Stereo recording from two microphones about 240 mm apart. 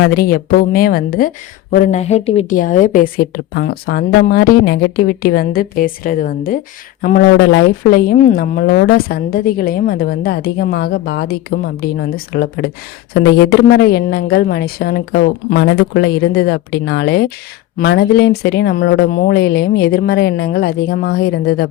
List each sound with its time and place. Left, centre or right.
0.0 s a woman's voice: left